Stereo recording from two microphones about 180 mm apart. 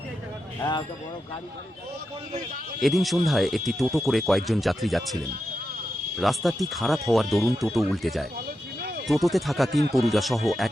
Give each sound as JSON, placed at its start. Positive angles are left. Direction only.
{"t": 0.6, "sound": "speech", "side_deg": 25}
{"t": 2.8, "sound": "speech", "side_deg": 0}
{"t": 6.1, "sound": "speech", "side_deg": 0}